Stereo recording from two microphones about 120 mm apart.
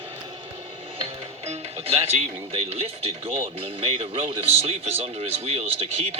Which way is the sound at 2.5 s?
55° right (ahead or behind).